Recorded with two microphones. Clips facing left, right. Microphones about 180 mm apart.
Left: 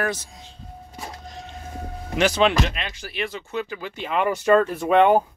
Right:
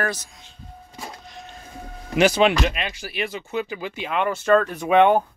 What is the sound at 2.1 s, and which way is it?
Speech, 10° right (ahead or behind).